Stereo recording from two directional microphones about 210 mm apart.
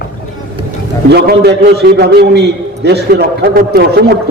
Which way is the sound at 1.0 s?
50° right (ahead or behind).